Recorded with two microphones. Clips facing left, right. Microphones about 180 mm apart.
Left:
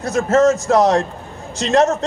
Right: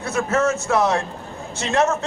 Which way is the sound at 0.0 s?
40° left (ahead or behind).